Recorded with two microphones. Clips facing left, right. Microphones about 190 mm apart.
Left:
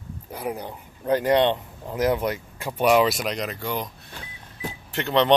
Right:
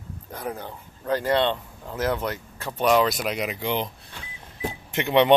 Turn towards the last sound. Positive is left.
turn(degrees=-15)  # may be behind; listen again after turning